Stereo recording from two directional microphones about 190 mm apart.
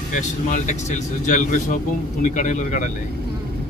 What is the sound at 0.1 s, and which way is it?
Speech, 40° left (ahead or behind).